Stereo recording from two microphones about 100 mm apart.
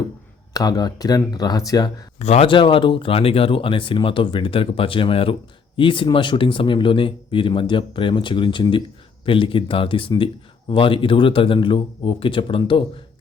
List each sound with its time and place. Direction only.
0.5 s speech: 40° left (ahead or behind)
2.1 s speech: 90° left
2.5 s speech: 60° left (ahead or behind)